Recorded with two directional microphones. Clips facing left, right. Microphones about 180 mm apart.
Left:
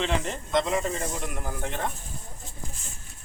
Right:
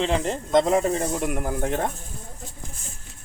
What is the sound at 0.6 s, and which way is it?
Speech, 45° right (ahead or behind).